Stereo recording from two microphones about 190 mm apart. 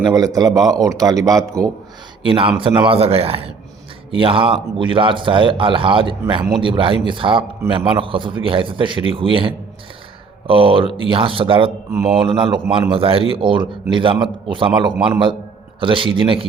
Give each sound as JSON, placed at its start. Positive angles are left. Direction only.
{"t": 0.0, "sound": "a man's voice", "side_deg": -20}
{"t": 11.9, "sound": "speech", "side_deg": -5}
{"t": 12.2, "sound": "a man's voice", "side_deg": -25}